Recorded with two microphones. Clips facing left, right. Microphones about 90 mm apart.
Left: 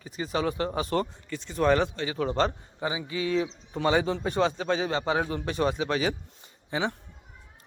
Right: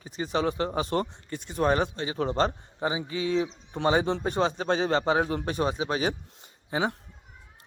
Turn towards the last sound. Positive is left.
turn(degrees=-40)  # may be behind; listen again after turning